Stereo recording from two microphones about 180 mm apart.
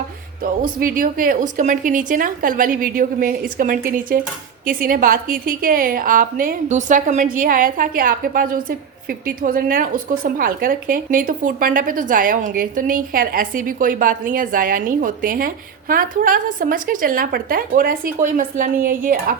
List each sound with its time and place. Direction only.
0.6 s a woman's voice: 50° right (ahead or behind)